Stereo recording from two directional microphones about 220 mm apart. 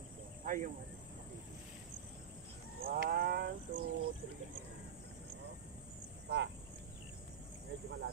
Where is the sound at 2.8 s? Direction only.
45° right (ahead or behind).